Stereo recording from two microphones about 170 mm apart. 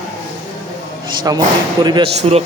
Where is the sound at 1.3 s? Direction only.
20° right (ahead or behind).